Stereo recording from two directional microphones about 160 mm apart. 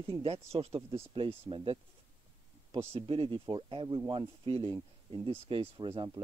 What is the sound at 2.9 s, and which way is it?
A man's voice, 35° right (ahead or behind).